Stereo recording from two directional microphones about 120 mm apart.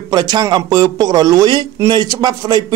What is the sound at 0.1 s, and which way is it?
A man's voice, 35° right (ahead or behind).